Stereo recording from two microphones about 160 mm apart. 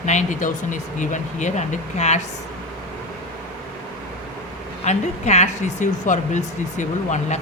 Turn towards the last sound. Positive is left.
turn(degrees=50)  # may be behind; listen again after turning